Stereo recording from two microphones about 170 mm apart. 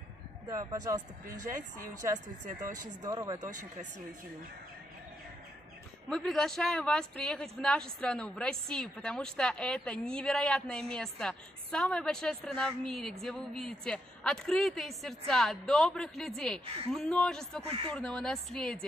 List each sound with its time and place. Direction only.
0.5 s speech: 20° right (ahead or behind)
1.2 s a woman's voice: 50° right (ahead or behind)
2.0 s speech: 15° right (ahead or behind)
6.0 s speech: centre (ahead or behind)
17.6 s speech: 35° right (ahead or behind)
17.9 s speech: 5° left (ahead or behind)